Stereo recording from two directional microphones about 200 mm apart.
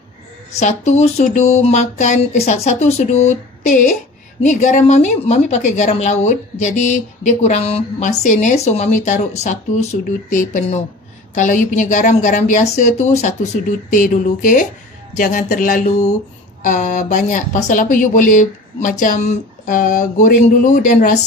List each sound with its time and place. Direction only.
0.6 s speech: 35° left (ahead or behind)